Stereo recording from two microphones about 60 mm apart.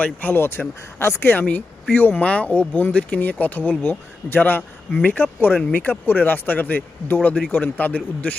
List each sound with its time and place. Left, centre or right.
0.0 s speech: left